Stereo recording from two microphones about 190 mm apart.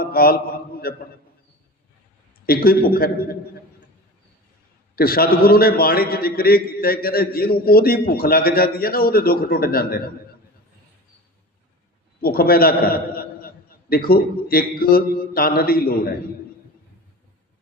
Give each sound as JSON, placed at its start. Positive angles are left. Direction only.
{"t": 0.0, "sound": "a man's voice", "side_deg": 50}
{"t": 2.5, "sound": "a man's voice", "side_deg": 50}
{"t": 4.9, "sound": "a man's voice", "side_deg": 50}
{"t": 12.2, "sound": "a man's voice", "side_deg": 50}